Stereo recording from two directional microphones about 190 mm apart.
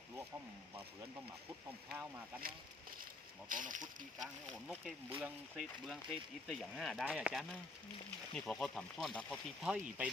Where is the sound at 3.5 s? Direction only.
45° right (ahead or behind).